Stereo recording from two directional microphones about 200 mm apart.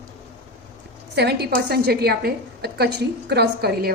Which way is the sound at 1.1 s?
55° right (ahead or behind).